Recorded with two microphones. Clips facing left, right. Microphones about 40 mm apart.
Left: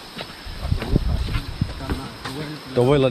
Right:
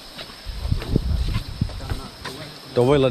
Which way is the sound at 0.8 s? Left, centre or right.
Centre.